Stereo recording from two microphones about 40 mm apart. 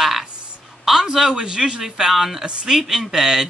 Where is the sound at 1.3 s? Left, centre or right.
Centre.